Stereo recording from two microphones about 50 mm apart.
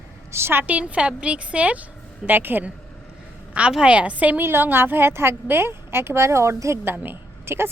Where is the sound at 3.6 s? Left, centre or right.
Right.